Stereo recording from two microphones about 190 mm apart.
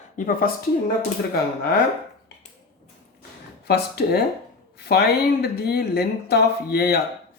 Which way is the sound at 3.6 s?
55° left (ahead or behind).